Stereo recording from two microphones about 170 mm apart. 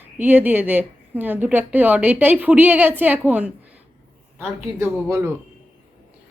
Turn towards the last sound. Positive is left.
turn(degrees=-15)  # may be behind; listen again after turning